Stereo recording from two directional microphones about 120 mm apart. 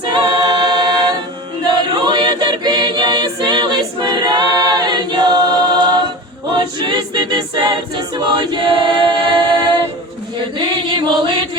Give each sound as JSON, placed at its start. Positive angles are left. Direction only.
{"t": 0.1, "sound": "a capella", "side_deg": -40}
{"t": 1.6, "sound": "choir", "side_deg": -40}
{"t": 6.5, "sound": "a capella", "side_deg": -40}
{"t": 10.6, "sound": "choir", "side_deg": -40}